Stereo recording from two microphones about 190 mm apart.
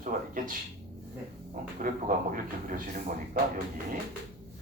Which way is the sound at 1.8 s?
45° right (ahead or behind).